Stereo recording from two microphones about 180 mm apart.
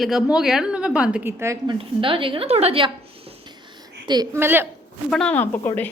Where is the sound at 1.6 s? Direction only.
30° right (ahead or behind).